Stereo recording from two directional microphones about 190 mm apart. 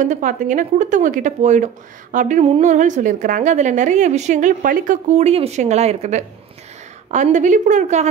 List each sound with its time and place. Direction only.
0.0 s a woman's voice: 40° right (ahead or behind)